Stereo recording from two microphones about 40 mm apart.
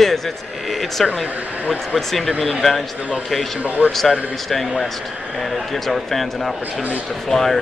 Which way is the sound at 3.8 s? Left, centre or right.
Right.